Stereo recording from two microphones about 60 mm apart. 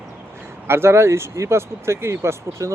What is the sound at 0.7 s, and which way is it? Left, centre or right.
Speech, right.